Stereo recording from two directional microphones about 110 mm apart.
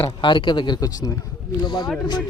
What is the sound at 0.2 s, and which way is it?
A man's voice, 45° left (ahead or behind).